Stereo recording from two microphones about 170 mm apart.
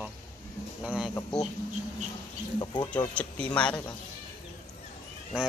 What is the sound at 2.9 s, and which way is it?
Speech, 10° left (ahead or behind).